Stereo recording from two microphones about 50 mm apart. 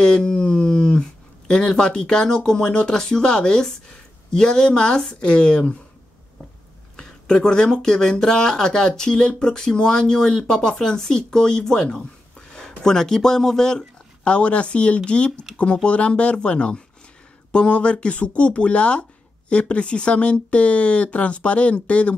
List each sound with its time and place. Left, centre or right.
0.0 s speech: centre
7.0 s speech: centre